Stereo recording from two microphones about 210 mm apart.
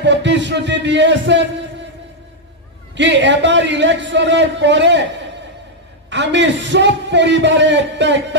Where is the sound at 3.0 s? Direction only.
60° right (ahead or behind).